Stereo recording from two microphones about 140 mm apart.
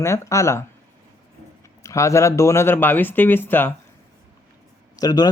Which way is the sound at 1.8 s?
20° left (ahead or behind).